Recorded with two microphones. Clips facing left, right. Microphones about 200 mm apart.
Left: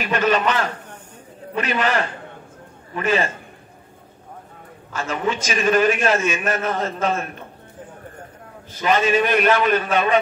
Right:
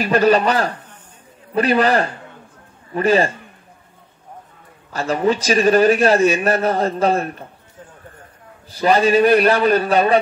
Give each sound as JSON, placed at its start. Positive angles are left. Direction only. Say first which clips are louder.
{"t": 0.0, "sound": "a man's voice", "louder": "right 5 dB", "side_deg": -35}
{"t": 4.9, "sound": "a man's voice", "louder": "right 6 dB", "side_deg": -35}
{"t": 8.7, "sound": "a man's voice", "louder": "right 4 dB", "side_deg": -35}